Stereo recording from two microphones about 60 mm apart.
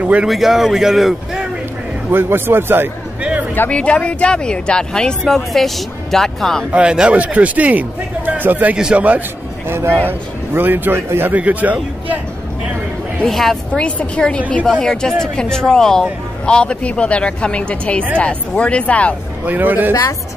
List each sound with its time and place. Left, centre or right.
0.3 s speech: centre
2.0 s a man's voice: right
3.2 s a sound: right
3.7 s speech: centre
6.7 s a man's voice: centre
8.7 s a man's voice: centre
9.7 s a man's voice: right
10.0 s a man's voice: right
11.3 s a man's voice: right
13.2 s speech: centre
13.7 s speech: centre
19.4 s a man's voice: right
19.9 s speech: left